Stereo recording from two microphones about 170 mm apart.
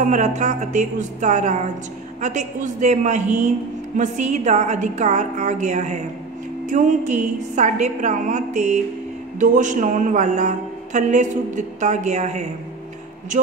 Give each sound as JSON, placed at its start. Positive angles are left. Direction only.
{"t": 0.0, "sound": "a woman's voice", "side_deg": -45}